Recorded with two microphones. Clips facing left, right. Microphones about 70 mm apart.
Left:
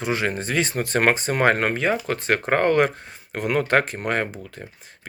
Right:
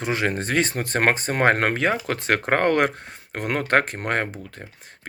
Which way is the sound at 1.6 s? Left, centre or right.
Right.